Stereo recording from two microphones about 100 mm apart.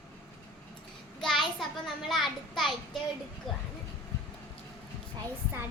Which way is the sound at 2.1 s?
Centre (ahead or behind).